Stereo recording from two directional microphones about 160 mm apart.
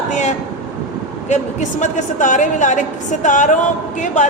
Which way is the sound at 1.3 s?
45° left (ahead or behind).